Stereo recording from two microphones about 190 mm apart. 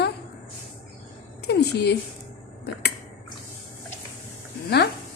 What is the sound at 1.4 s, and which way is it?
Speech, 60° left (ahead or behind).